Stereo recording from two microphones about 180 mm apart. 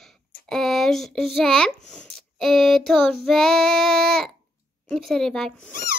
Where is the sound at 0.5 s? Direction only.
Centre (ahead or behind).